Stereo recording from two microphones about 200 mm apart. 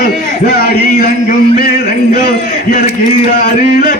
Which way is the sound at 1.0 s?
45° left (ahead or behind).